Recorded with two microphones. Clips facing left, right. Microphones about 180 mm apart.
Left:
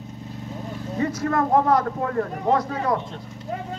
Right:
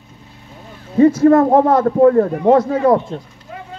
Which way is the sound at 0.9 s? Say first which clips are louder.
Right 14 dB; 30° right (ahead or behind).